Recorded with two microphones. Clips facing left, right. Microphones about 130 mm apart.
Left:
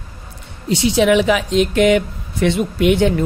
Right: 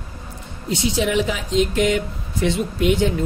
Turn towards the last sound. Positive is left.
turn(degrees=65)  # may be behind; listen again after turning